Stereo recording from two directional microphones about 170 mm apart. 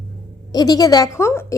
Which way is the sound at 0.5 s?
20° left (ahead or behind).